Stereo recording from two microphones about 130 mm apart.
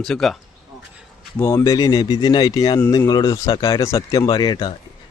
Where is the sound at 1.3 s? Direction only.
20° left (ahead or behind).